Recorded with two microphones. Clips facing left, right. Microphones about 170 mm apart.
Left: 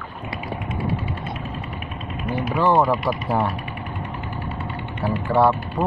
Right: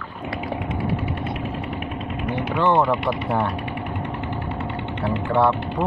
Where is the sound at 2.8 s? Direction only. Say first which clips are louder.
Even; 25° right (ahead or behind).